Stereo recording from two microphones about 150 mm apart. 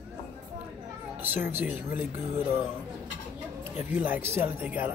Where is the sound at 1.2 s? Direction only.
10° right (ahead or behind).